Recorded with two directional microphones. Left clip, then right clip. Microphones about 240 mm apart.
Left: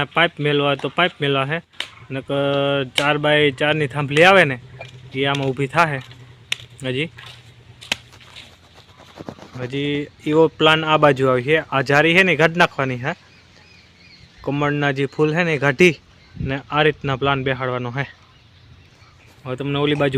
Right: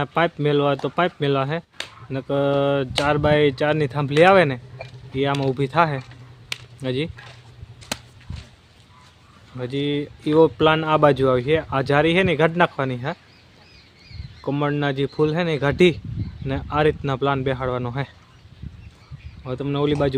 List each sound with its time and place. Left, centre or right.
0.0 s speech: centre
7.8 s a sound: centre
9.6 s speech: centre
14.4 s speech: centre
19.5 s speech: centre